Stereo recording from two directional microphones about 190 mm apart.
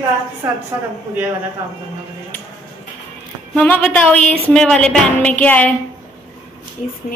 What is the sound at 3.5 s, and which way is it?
A woman's voice, 10° left (ahead or behind).